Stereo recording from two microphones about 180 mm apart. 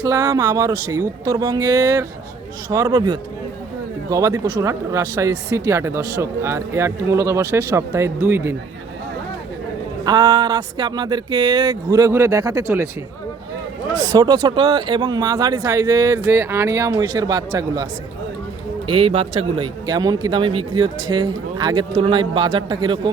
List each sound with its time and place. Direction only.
0.0 s speech: 20° right (ahead or behind)
10.0 s speech: 25° right (ahead or behind)
13.9 s speech: 20° right (ahead or behind)
18.9 s speech: 30° right (ahead or behind)